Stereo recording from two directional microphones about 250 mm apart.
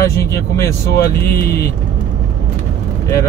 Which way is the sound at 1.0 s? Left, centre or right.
Left.